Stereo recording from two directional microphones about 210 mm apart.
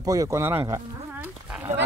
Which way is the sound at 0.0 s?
15° right (ahead or behind).